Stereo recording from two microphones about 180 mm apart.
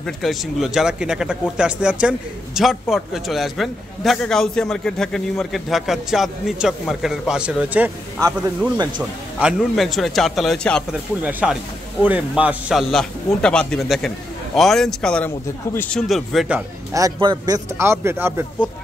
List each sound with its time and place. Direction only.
0.0 s a man's voice: centre (ahead or behind)
8.2 s speech: 20° right (ahead or behind)
9.4 s a man's voice: centre (ahead or behind)
11.2 s a man's voice: 10° right (ahead or behind); by 16.0 s 10° left (ahead or behind)
16.1 s a man's voice: centre (ahead or behind)
16.9 s speech: 20° right (ahead or behind)